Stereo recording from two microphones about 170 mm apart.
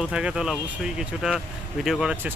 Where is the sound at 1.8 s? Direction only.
5° right (ahead or behind).